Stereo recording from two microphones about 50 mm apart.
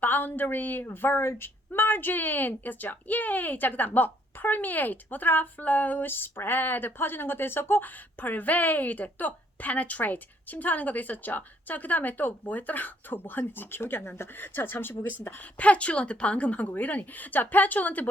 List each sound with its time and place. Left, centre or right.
0.0 s a woman's voice: left
15.5 s a woman's voice: left